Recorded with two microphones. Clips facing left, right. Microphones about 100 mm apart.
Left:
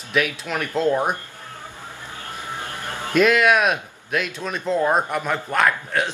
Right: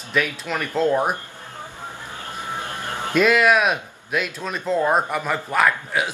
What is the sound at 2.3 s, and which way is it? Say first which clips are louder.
Vehicle: right 2 dB; 20° right (ahead or behind).